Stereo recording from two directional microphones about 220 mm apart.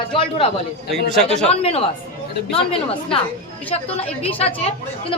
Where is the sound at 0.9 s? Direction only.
Centre (ahead or behind).